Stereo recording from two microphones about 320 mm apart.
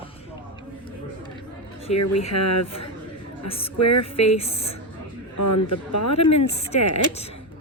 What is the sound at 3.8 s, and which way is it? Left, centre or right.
Speech, left.